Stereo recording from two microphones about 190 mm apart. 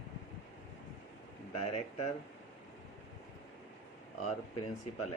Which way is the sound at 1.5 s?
35° left (ahead or behind).